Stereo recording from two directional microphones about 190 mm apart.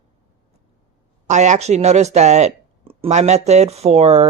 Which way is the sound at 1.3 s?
40° right (ahead or behind).